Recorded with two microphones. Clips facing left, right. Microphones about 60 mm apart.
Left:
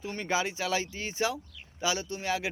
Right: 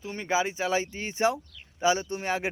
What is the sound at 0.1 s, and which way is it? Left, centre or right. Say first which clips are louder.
Speech: right 3 dB; centre.